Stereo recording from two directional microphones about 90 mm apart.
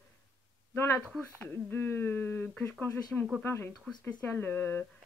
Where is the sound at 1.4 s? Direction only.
20° left (ahead or behind).